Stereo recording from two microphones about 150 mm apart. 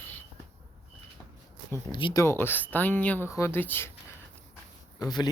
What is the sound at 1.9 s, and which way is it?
Speech, 30° left (ahead or behind).